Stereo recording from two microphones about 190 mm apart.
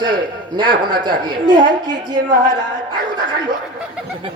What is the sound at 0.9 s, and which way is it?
A woman's voice, 25° right (ahead or behind).